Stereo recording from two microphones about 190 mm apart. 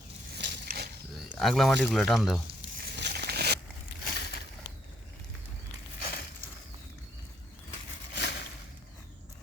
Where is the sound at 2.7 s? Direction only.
55° right (ahead or behind).